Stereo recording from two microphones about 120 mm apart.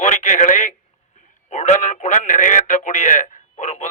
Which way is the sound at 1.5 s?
80° left.